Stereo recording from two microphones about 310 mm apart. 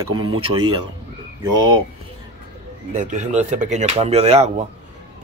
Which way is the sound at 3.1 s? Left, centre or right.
Right.